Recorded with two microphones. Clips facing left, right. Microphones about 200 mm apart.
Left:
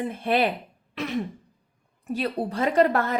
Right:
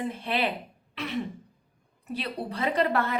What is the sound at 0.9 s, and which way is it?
Throat clearing, 45° left (ahead or behind).